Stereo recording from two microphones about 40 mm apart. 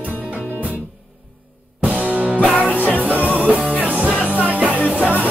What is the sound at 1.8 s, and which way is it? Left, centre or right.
Music, right.